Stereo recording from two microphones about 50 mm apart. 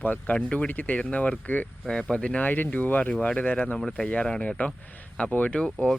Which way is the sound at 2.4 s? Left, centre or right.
Left.